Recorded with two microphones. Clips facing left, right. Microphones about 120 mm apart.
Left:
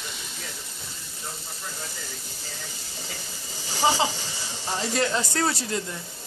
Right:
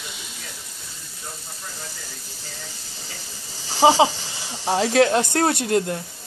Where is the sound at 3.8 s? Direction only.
90° right; by 6.0 s 60° right (ahead or behind).